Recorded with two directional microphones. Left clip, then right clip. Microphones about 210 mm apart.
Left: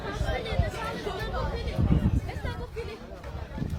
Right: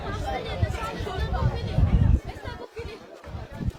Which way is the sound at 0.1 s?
40° left (ahead or behind).